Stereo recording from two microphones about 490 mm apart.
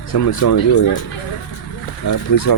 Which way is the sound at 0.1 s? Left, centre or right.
Left.